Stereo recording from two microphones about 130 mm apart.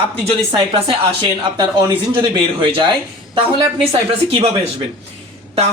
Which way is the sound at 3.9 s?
45° right (ahead or behind).